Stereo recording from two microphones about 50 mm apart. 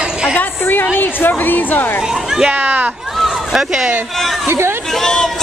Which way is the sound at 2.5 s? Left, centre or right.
Right.